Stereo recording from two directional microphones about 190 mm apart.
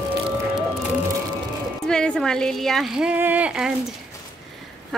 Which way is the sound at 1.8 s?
5° left (ahead or behind).